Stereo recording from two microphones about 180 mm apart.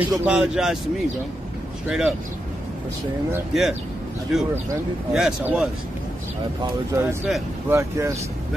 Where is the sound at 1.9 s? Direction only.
Centre (ahead or behind).